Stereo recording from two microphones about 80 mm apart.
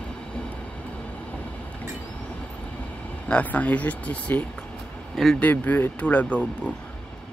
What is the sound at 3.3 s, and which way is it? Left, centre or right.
Speech, centre.